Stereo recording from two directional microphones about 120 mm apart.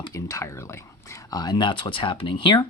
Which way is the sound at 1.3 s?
40° left (ahead or behind).